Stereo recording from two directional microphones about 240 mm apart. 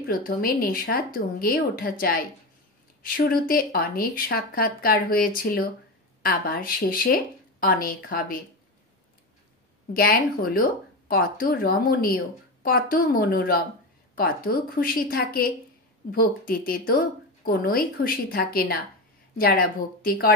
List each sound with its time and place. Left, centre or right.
0.1 s speech: left
9.9 s speech: left